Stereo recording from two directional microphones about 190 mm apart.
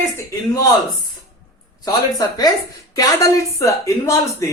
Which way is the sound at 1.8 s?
20° left (ahead or behind).